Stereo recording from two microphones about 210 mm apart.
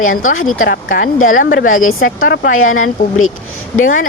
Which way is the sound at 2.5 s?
75° left (ahead or behind).